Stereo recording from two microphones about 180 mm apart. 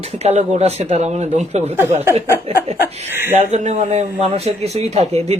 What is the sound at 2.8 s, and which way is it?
Speech, 10° right (ahead or behind).